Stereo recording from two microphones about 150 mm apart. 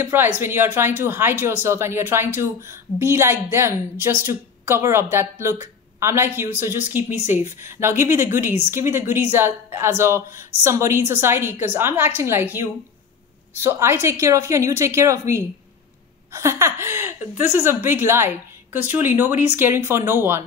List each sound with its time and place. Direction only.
0.0 s speech: 15° right (ahead or behind)